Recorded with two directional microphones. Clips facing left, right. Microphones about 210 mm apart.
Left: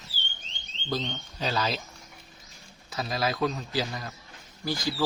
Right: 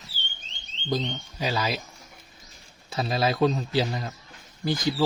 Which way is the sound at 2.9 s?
25° right (ahead or behind).